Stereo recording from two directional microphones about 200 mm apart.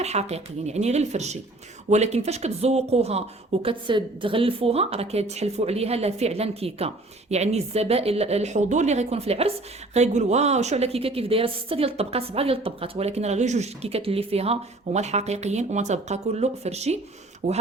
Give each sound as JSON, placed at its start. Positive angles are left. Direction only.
{"t": 0.0, "sound": "a woman's voice", "side_deg": -35}